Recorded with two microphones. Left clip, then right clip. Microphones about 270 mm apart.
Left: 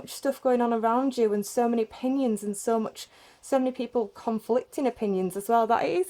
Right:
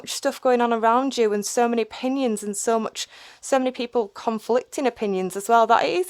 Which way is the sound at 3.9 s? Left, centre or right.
Right.